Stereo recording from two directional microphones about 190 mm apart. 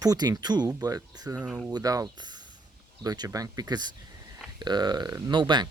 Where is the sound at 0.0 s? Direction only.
20° right (ahead or behind).